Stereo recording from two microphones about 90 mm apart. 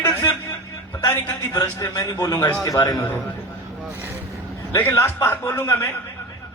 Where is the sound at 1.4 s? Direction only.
40° left (ahead or behind).